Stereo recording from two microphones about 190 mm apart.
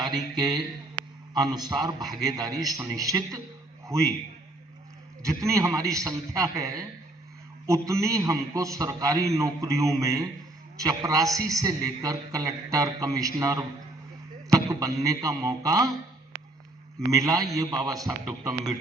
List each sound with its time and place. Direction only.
0.0 s a man's voice: 20° right (ahead or behind)
5.2 s a man's voice: 15° right (ahead or behind)
17.1 s a man's voice: 20° right (ahead or behind)